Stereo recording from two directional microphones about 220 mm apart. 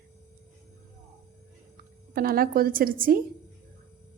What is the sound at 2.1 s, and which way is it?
Speech, 40° right (ahead or behind).